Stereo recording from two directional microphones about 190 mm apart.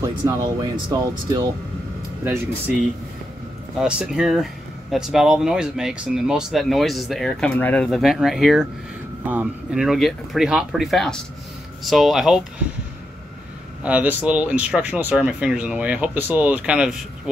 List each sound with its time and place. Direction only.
0.0 s speech: 20° right (ahead or behind)
3.7 s speech: centre (ahead or behind)
13.8 s speech: 5° right (ahead or behind)